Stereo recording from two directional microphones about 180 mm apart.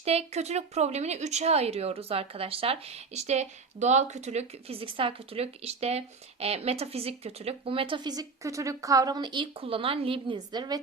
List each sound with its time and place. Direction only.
0.0 s a woman's voice: 35° right (ahead or behind)